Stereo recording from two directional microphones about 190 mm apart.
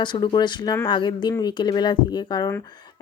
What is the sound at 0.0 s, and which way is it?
Speech, 25° left (ahead or behind).